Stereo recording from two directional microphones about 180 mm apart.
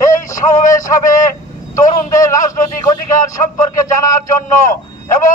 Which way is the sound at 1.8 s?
20° left (ahead or behind).